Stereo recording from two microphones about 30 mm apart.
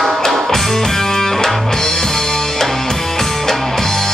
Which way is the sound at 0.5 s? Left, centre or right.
Centre.